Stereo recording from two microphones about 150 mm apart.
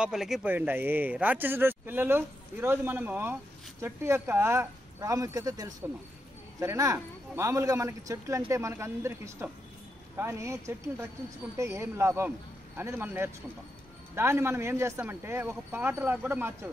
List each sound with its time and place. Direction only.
0.0 s speech: 5° right (ahead or behind)